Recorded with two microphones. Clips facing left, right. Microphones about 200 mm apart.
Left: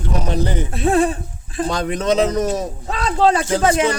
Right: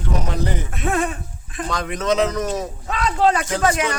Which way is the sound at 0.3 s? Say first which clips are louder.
Left 4 dB; 30° left (ahead or behind).